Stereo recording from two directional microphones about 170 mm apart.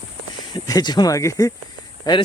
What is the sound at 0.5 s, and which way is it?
Speech, 25° left (ahead or behind).